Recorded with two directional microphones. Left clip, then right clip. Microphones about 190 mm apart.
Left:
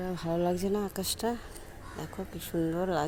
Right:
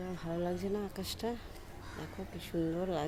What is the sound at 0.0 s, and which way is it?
Speech, 50° left (ahead or behind).